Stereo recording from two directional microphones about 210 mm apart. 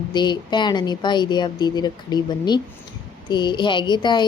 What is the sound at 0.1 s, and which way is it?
Child singing, 20° left (ahead or behind).